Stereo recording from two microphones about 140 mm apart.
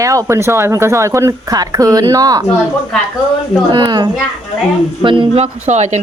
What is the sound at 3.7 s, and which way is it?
Speech, 30° right (ahead or behind).